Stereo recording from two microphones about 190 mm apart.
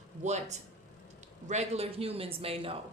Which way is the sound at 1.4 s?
35° right (ahead or behind).